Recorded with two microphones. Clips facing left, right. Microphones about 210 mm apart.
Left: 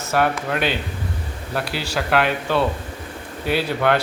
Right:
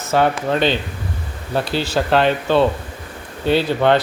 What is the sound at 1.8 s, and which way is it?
Speech, 25° right (ahead or behind).